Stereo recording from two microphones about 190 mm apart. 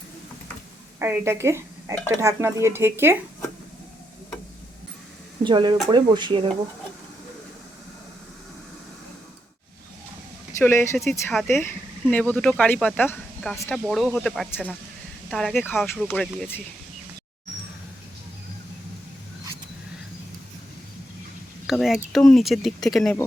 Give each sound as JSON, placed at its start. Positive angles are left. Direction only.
{"t": 0.9, "sound": "speech", "side_deg": -10}
{"t": 2.0, "sound": "dishes", "side_deg": -15}
{"t": 5.4, "sound": "speech", "side_deg": -25}
{"t": 10.6, "sound": "speech", "side_deg": 10}
{"t": 11.0, "sound": "speech", "side_deg": 0}
{"t": 11.4, "sound": "speech", "side_deg": 15}
{"t": 21.7, "sound": "speech", "side_deg": 0}